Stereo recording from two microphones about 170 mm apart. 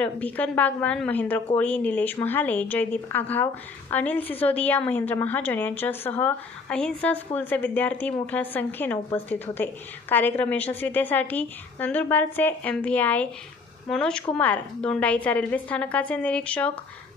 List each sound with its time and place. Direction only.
0.0 s a woman's voice: 10° left (ahead or behind)